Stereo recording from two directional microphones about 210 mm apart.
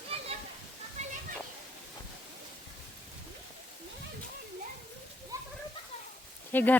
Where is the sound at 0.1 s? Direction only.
30° right (ahead or behind).